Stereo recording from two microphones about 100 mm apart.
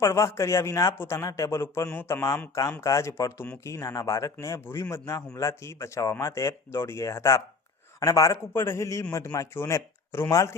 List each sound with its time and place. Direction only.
0.0 s a man's voice: 30° left (ahead or behind)
2.8 s a man's voice: 35° left (ahead or behind)